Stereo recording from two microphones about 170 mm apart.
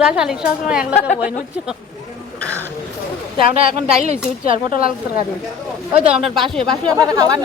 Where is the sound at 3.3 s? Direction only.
35° right (ahead or behind).